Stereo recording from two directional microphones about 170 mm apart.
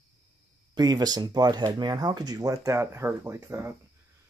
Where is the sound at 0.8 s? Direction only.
25° right (ahead or behind).